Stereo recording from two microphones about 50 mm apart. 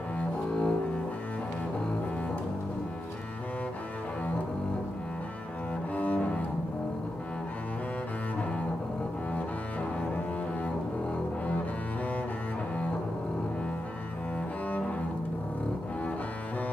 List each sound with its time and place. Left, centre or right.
0.2 s double bass: left
5.9 s cello: left
9.3 s double bass: left